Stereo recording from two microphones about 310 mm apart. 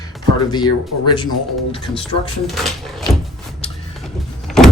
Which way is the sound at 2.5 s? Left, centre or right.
Centre.